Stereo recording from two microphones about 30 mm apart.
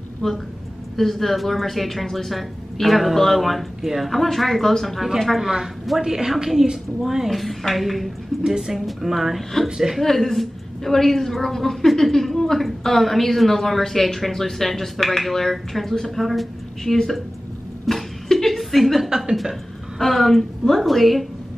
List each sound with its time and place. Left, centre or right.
0.2 s a woman's voice: centre
4.1 s a woman's voice: centre
5.4 s a woman's voice: centre
7.2 s a woman's voice: centre
8.5 s speech: centre
8.7 s a woman's voice: centre
10.0 s a woman's voice: centre
17.9 s a sound: centre
19.0 s speech: right
20.0 s a woman's voice: centre